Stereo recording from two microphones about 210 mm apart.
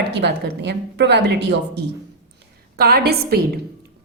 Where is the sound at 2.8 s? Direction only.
50° right (ahead or behind).